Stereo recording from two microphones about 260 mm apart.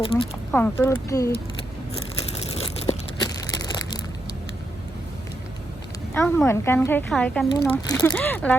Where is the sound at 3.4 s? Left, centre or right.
Centre.